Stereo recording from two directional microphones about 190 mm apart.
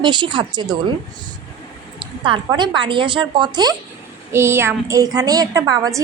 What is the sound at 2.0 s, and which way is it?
A woman's voice, 25° right (ahead or behind).